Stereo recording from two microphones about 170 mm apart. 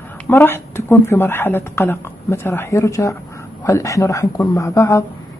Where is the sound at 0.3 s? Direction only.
10° left (ahead or behind).